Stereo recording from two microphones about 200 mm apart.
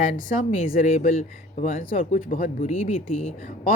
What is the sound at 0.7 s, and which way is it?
Speech, 40° left (ahead or behind).